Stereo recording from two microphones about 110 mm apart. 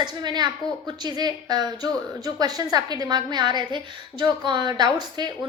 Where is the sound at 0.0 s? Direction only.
40° right (ahead or behind).